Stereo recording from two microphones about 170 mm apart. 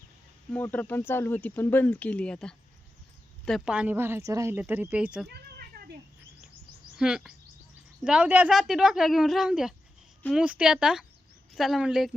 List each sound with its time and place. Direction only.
0.5 s speech: 10° left (ahead or behind)
3.7 s a woman's voice: 10° right (ahead or behind)
5.3 s a sound: 65° right (ahead or behind)
6.9 s speech: 5° right (ahead or behind)